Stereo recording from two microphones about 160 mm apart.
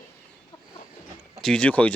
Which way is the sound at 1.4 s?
5° left (ahead or behind).